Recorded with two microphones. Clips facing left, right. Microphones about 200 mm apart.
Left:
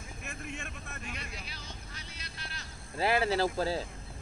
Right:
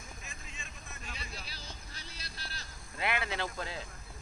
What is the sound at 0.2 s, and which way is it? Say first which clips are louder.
Vehicle: left 9 dB; 65° left (ahead or behind).